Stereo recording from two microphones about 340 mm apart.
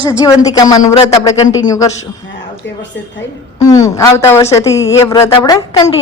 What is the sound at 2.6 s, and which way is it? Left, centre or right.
Speech, left.